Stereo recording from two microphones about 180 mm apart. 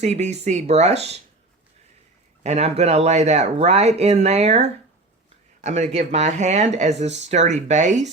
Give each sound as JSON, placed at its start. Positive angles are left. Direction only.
{"t": 0.0, "sound": "speech", "side_deg": -40}
{"t": 2.4, "sound": "speech", "side_deg": -40}